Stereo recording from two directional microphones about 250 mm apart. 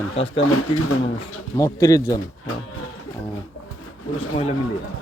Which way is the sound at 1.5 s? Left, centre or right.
Centre.